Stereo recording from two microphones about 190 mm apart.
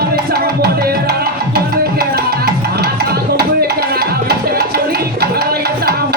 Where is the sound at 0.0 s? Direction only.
55° right (ahead or behind).